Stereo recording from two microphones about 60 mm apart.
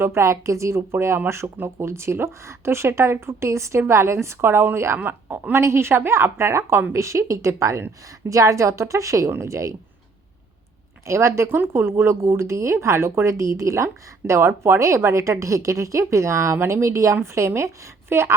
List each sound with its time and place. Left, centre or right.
0.0 s a woman's voice: right
11.0 s a woman's voice: right
11.4 s speech: right